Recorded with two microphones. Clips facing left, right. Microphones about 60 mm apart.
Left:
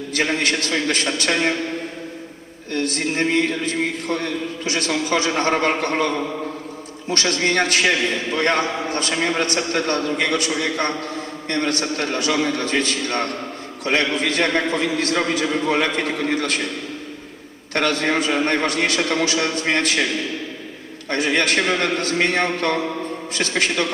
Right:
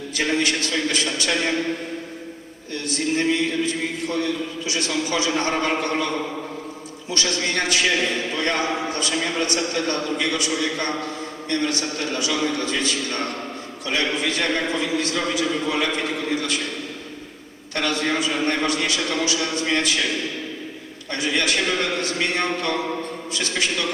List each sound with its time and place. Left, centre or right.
0.1 s a man's voice: left
2.7 s a man's voice: left
7.1 s a man's voice: left
17.7 s a man's voice: left
21.1 s a man's voice: left